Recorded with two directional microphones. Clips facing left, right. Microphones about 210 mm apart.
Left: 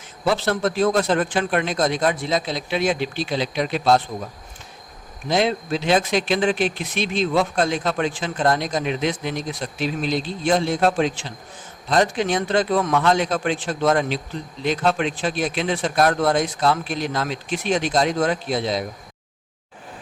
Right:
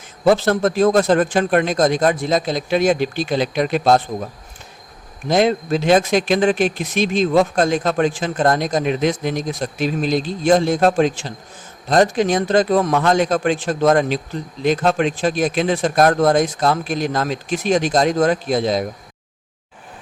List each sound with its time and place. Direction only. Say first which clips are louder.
0.3 s speech: right 6 dB; 45° right (ahead or behind)
5.3 s speech: right 5 dB; 45° right (ahead or behind)